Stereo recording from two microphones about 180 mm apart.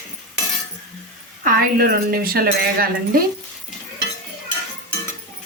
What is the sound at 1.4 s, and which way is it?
A woman's voice, 55° right (ahead or behind).